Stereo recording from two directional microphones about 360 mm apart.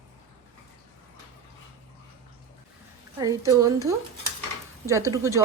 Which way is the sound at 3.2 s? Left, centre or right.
Centre.